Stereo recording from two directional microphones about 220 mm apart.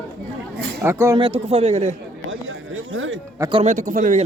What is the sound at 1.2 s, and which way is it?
Speech, 25° right (ahead or behind).